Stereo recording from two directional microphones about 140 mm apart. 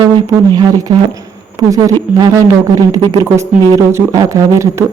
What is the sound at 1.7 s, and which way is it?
Speech, 25° right (ahead or behind).